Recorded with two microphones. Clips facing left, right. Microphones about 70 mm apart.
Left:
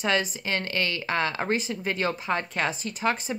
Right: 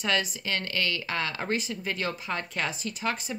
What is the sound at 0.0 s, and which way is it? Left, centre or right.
Speech, left.